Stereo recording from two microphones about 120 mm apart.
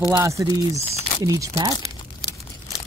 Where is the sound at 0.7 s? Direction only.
60° left (ahead or behind).